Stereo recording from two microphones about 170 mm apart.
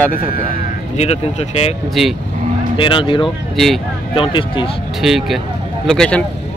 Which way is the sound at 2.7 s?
30° left (ahead or behind).